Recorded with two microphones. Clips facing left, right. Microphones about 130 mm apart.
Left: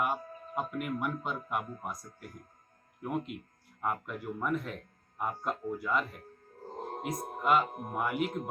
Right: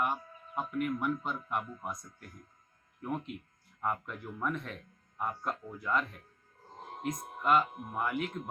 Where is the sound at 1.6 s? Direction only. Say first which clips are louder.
Left 2 dB; 45° left (ahead or behind).